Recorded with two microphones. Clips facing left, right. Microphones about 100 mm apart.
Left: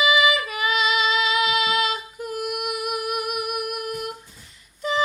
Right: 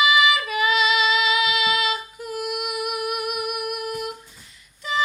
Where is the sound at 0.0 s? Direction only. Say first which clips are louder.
Right 1 dB; 35° left (ahead or behind).